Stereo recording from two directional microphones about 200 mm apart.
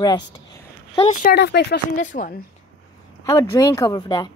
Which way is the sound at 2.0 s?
40° left (ahead or behind).